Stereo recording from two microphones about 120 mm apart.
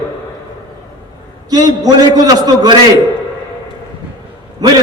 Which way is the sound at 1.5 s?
30° right (ahead or behind).